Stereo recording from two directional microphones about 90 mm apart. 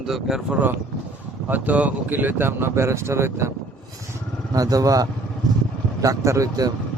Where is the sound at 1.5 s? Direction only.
20° right (ahead or behind).